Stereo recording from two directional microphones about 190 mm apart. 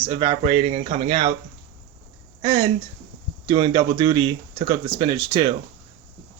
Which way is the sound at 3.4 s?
25° right (ahead or behind).